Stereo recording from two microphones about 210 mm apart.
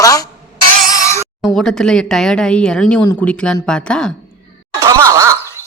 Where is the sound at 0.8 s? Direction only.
15° left (ahead or behind).